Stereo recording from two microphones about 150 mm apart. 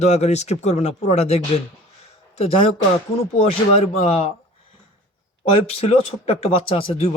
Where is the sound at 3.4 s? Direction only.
40° left (ahead or behind).